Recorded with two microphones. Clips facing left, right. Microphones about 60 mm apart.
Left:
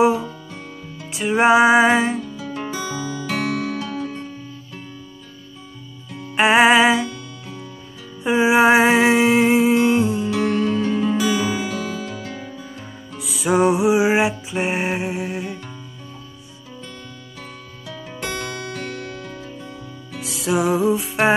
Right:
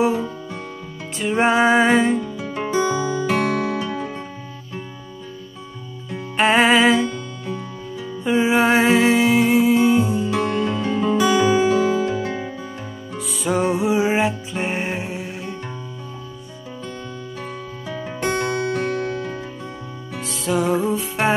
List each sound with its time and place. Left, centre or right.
1.1 s music: centre
2.3 s music: right
3.3 s music: right
3.9 s music: right
6.3 s music: centre
7.1 s music: right
8.2 s music: centre
10.8 s music: right
11.2 s music: centre
11.6 s music: right
13.2 s music: centre
17.8 s music: right
20.3 s music: centre